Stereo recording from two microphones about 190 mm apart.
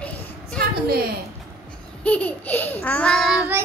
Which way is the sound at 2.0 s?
5° left (ahead or behind).